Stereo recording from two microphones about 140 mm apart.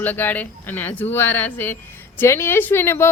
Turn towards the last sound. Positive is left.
turn(degrees=15)  # may be behind; listen again after turning